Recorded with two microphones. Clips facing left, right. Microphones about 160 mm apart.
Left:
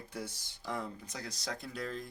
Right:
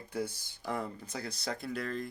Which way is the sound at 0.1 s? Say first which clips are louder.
Right 8 dB; 55° right (ahead or behind).